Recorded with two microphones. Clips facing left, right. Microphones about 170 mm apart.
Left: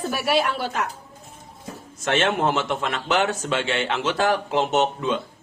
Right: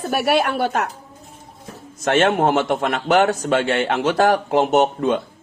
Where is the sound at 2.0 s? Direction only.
50° right (ahead or behind).